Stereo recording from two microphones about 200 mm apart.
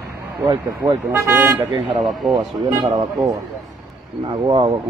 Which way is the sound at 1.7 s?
25° right (ahead or behind).